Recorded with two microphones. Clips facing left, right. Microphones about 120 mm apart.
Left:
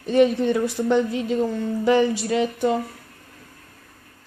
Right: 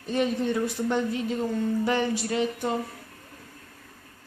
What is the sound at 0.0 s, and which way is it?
Speech, 70° left (ahead or behind).